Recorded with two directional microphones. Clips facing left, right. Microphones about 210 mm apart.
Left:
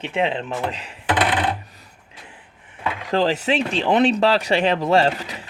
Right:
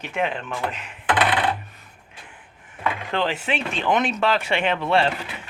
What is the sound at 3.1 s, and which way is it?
Speech, 35° left (ahead or behind).